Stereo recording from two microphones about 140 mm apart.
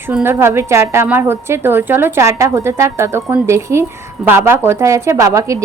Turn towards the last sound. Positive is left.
turn(degrees=-25)  # may be behind; listen again after turning